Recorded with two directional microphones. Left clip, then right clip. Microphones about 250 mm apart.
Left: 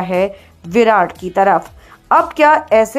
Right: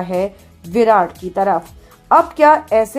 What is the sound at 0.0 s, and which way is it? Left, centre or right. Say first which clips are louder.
A woman's voice: left 3 dB; centre.